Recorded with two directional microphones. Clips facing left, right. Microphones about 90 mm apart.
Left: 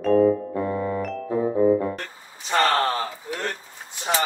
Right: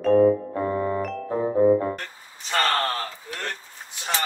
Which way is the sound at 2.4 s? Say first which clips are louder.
Left 3 dB; 10° left (ahead or behind).